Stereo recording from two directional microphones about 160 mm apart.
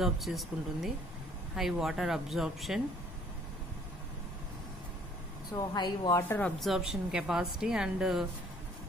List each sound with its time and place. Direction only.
0.0 s a woman's voice: centre (ahead or behind)
5.5 s speech: 25° left (ahead or behind)
6.2 s speech: 10° left (ahead or behind)
6.6 s a woman's voice: centre (ahead or behind)